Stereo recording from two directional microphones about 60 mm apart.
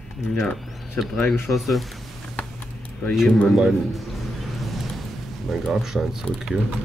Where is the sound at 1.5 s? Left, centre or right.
Centre.